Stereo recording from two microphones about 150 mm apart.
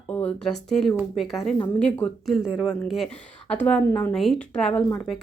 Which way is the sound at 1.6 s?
10° left (ahead or behind).